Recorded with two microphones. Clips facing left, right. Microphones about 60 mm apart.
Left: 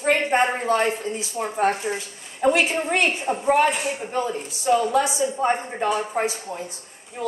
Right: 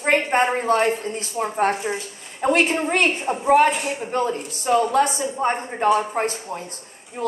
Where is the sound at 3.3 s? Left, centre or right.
Right.